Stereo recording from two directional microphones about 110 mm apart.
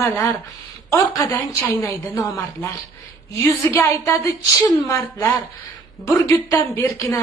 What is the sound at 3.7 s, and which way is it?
Speech, 25° left (ahead or behind).